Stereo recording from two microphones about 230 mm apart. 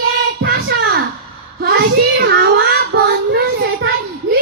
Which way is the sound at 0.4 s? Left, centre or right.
Right.